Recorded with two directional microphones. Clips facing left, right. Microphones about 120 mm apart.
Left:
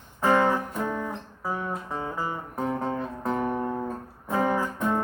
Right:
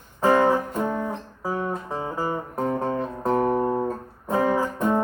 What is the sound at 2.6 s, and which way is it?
Music, 10° right (ahead or behind).